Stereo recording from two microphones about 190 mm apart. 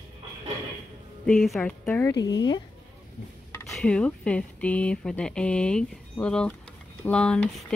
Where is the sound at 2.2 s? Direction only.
20° left (ahead or behind).